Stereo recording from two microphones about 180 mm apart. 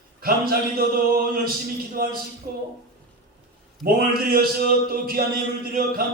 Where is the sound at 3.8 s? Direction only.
55° right (ahead or behind).